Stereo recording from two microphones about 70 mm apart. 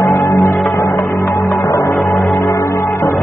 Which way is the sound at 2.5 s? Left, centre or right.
Left.